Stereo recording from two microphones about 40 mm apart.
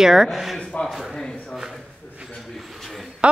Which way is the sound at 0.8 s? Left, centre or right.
Left.